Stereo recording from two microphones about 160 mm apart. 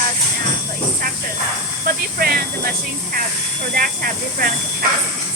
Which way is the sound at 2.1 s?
70° right (ahead or behind).